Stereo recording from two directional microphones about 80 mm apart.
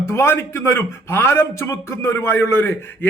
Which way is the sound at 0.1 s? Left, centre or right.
Left.